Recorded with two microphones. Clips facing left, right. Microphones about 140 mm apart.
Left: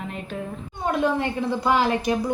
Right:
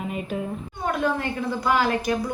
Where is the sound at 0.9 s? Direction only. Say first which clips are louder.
Left 2 dB; 25° left (ahead or behind).